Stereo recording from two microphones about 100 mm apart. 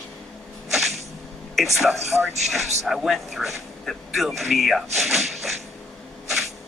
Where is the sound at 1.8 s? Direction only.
Centre (ahead or behind).